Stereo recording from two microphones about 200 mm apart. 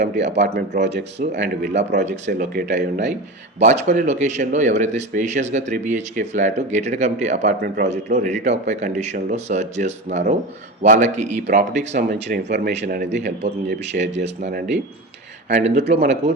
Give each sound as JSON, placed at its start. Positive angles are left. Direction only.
{"t": 0.1, "sound": "speech", "side_deg": -60}
{"t": 2.0, "sound": "speech", "side_deg": -35}
{"t": 2.6, "sound": "speech", "side_deg": -65}
{"t": 3.6, "sound": "speech", "side_deg": -35}
{"t": 12.0, "sound": "speech", "side_deg": -50}
{"t": 15.4, "sound": "speech", "side_deg": -35}